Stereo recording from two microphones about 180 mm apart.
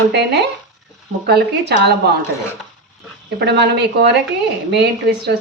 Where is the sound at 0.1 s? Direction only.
65° right (ahead or behind).